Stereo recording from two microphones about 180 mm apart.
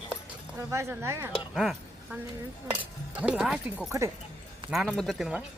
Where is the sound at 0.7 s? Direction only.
15° right (ahead or behind).